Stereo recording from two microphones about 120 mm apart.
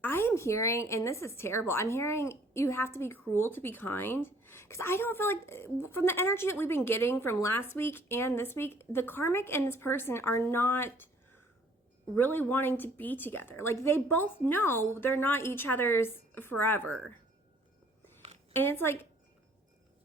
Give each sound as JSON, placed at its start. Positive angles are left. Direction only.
{"t": 0.0, "sound": "a woman's voice", "side_deg": 20}
{"t": 12.1, "sound": "a woman's voice", "side_deg": 15}
{"t": 18.5, "sound": "a woman's voice", "side_deg": 20}